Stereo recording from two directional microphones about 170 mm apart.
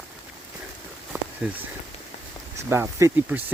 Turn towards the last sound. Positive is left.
turn(degrees=-10)  # may be behind; listen again after turning